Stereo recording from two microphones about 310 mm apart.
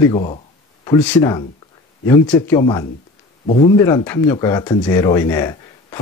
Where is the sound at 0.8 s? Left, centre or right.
Centre.